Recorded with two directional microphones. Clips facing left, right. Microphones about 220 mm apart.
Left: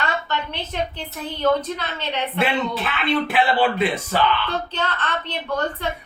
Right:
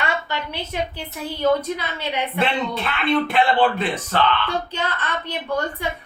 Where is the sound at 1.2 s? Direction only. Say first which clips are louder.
Right 1 dB; 10° right (ahead or behind).